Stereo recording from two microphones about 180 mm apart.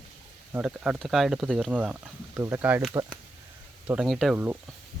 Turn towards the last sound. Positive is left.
turn(degrees=0)  # may be behind; listen again after turning